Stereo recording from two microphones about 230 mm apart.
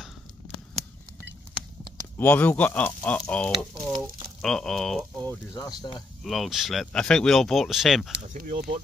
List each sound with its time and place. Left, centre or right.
2.1 s speech: centre
3.5 s speech: right
4.4 s speech: centre
5.5 s speech: centre
6.2 s speech: centre
8.1 s speech: right